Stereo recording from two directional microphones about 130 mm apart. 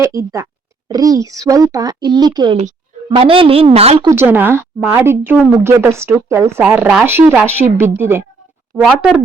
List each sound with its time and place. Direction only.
0.0 s speech: 25° right (ahead or behind)
3.1 s a woman's voice: 45° right (ahead or behind)
4.0 s speech: 20° right (ahead or behind)
6.6 s speech: 10° right (ahead or behind)
8.7 s a woman's voice: centre (ahead or behind)